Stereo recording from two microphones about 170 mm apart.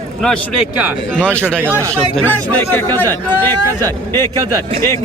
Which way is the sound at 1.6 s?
15° right (ahead or behind).